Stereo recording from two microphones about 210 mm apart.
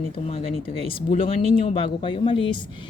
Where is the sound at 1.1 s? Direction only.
25° left (ahead or behind).